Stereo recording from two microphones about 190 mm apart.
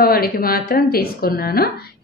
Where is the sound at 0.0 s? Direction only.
50° left (ahead or behind).